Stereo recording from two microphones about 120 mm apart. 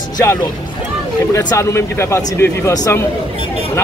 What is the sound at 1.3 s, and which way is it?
Speech, 25° left (ahead or behind).